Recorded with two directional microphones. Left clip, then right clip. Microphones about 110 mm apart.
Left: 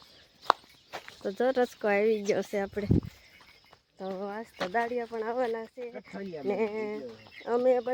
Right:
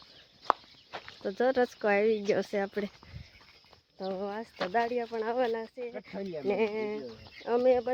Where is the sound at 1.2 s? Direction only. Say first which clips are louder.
Even; 10° left (ahead or behind).